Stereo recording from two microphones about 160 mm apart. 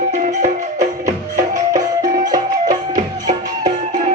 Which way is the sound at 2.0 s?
55° right (ahead or behind).